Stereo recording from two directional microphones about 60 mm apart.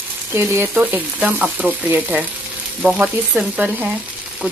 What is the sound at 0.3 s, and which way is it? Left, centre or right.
Speech, right.